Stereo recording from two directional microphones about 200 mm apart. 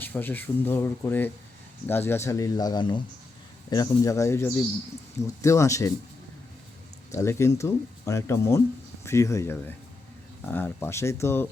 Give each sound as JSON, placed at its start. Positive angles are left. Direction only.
{"t": 0.0, "sound": "speech", "side_deg": 10}
{"t": 7.1, "sound": "speech", "side_deg": 15}